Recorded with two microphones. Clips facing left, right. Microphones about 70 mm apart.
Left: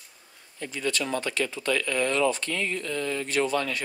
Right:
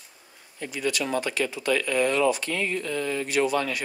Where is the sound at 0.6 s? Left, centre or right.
Centre.